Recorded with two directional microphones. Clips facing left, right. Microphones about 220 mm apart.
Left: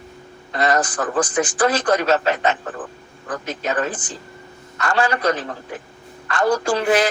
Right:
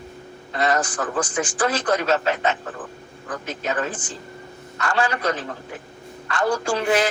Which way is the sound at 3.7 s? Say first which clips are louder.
Left 3 dB; 70° left (ahead or behind).